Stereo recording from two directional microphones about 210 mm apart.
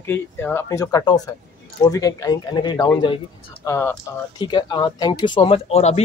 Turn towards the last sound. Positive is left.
turn(degrees=30)  # may be behind; listen again after turning